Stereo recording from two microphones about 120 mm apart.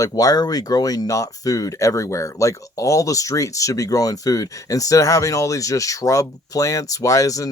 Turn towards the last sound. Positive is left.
turn(degrees=30)  # may be behind; listen again after turning